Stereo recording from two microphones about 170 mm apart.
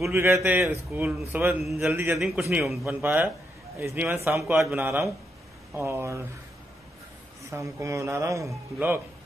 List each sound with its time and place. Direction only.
0.1 s a man's voice: 15° right (ahead or behind)
1.9 s a man's voice: 15° right (ahead or behind)
2.1 s a man's voice: centre (ahead or behind)
2.8 s a man's voice: 10° right (ahead or behind)
7.5 s a man's voice: 15° right (ahead or behind)